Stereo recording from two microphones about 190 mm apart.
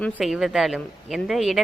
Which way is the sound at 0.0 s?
5° left (ahead or behind).